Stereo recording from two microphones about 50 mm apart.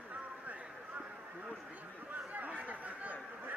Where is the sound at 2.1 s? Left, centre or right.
Right.